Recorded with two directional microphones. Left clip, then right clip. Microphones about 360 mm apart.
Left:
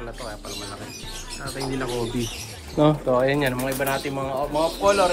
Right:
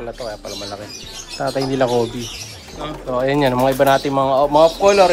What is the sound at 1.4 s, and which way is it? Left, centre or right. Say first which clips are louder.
Speech: right 12 dB; centre.